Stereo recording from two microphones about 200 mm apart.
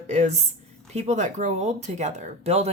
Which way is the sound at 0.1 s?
35° right (ahead or behind).